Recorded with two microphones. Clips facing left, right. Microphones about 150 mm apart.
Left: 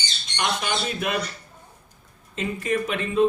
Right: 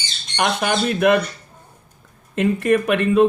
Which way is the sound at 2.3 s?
60° right (ahead or behind).